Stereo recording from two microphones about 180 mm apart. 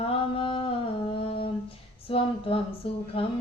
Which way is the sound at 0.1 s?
30° left (ahead or behind).